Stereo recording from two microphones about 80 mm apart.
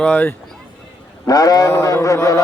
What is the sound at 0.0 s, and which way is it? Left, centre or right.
Speech, left.